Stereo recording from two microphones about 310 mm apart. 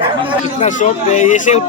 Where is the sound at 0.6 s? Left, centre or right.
Left.